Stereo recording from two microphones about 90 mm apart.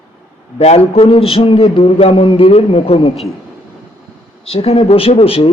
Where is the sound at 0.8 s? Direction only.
90° left.